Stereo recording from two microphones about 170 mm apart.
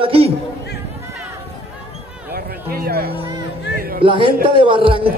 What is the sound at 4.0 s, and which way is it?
Speech, 30° right (ahead or behind).